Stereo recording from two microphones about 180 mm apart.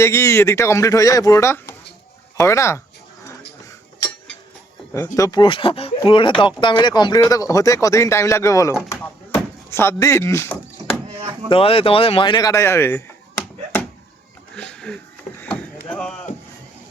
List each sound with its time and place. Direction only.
0.0 s speech: 15° left (ahead or behind)
4.9 s speech: 15° left (ahead or behind)
11.1 s chop: 35° right (ahead or behind)
11.4 s speech: 30° left (ahead or behind); by 13.4 s 15° left (ahead or behind)
14.5 s a sound: 5° left (ahead or behind)